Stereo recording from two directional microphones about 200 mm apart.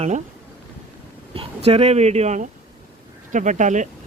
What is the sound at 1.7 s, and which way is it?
Speech, 30° right (ahead or behind).